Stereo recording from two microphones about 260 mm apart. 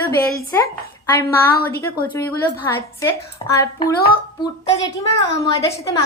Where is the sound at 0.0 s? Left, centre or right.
Centre.